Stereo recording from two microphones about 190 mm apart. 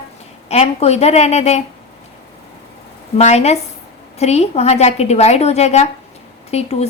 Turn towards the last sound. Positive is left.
turn(degrees=35)  # may be behind; listen again after turning